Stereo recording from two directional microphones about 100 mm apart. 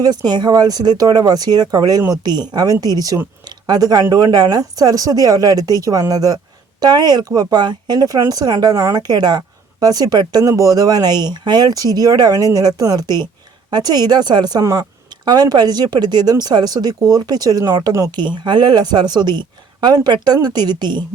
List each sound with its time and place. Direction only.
0.3 s speech: 45° right (ahead or behind)
18.2 s speech: 50° right (ahead or behind)